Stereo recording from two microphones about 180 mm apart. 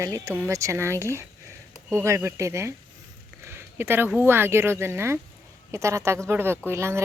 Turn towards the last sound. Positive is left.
turn(degrees=-15)  # may be behind; listen again after turning